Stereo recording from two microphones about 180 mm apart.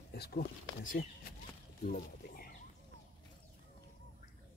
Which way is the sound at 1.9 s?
50° left (ahead or behind).